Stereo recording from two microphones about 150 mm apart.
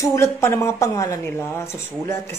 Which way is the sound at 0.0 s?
20° left (ahead or behind).